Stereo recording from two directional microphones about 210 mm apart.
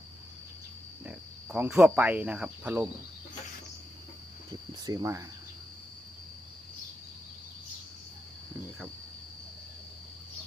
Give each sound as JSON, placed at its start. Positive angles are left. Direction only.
{"t": 1.0, "sound": "speech", "side_deg": -5}
{"t": 4.9, "sound": "speech", "side_deg": -15}